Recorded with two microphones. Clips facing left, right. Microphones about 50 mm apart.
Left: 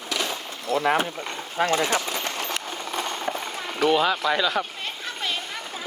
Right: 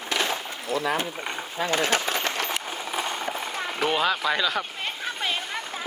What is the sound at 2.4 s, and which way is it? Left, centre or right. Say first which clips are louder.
Clip-clop: even; centre.